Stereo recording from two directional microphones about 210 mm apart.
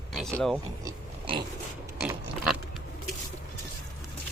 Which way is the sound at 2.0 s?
5° right (ahead or behind).